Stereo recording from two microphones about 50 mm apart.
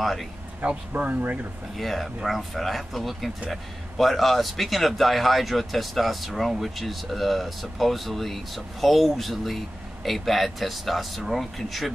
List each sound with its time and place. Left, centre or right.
0.0 s speech: centre
0.7 s speech: right
1.8 s speech: centre